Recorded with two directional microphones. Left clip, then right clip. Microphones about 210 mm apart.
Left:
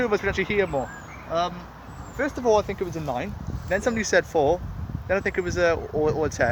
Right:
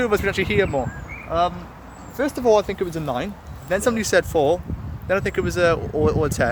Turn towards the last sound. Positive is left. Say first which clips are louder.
# right 3 dB
turn(degrees=-5)  # may be behind; listen again after turning